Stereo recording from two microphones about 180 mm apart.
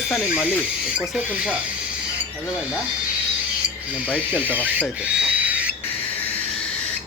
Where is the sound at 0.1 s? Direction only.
5° right (ahead or behind).